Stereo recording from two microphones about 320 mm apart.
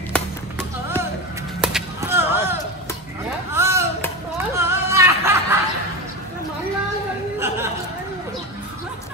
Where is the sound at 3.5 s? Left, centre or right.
Centre.